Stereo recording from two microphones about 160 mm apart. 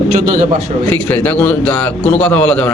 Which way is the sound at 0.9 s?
10° left (ahead or behind).